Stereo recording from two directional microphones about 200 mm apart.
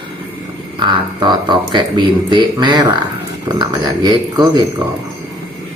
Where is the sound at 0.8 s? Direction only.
20° right (ahead or behind).